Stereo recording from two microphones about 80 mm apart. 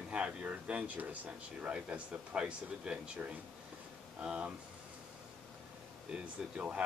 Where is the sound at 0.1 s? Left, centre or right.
Centre.